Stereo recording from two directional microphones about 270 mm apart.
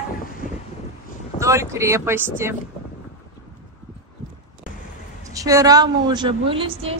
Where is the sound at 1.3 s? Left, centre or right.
Centre.